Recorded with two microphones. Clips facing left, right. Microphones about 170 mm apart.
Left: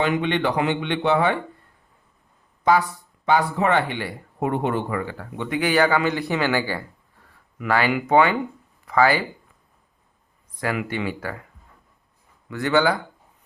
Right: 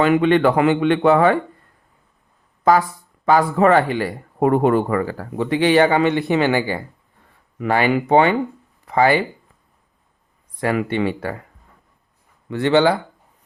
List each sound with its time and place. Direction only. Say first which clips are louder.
0.0 s speech: right 7 dB; 50° right (ahead or behind)
3.2 s speech: right 5 dB; 45° right (ahead or behind); by 9.2 s 25° right (ahead or behind)
10.6 s speech: right 6 dB; 30° right (ahead or behind)
12.5 s speech: right 5 dB; 30° right (ahead or behind)